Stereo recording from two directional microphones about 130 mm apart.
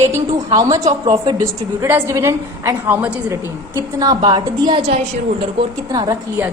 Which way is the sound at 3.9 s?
30° right (ahead or behind).